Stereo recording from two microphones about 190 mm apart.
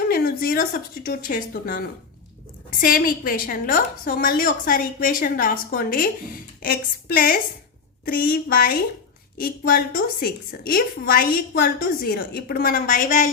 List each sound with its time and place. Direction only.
0.1 s a woman's voice: 50° left (ahead or behind)